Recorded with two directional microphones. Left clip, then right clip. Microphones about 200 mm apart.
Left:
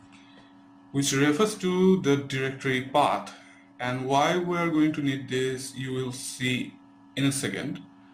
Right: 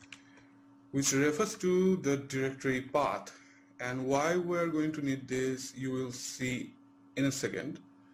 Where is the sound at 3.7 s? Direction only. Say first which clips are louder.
Left 7 dB; 35° right (ahead or behind).